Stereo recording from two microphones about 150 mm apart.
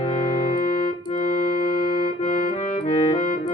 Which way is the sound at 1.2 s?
65° left (ahead or behind).